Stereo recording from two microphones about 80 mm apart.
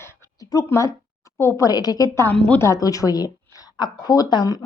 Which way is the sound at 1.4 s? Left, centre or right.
Left.